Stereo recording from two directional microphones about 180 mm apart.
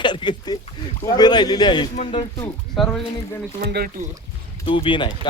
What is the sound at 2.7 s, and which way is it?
Speech, 5° left (ahead or behind).